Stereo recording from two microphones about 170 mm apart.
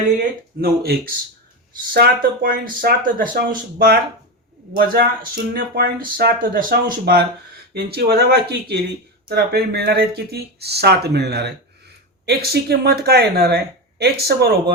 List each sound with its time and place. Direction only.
0.6 s speech: 65° right (ahead or behind)
3.3 s speech: 65° right (ahead or behind)